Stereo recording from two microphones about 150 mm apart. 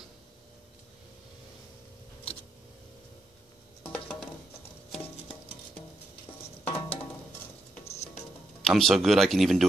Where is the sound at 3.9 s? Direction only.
5° left (ahead or behind).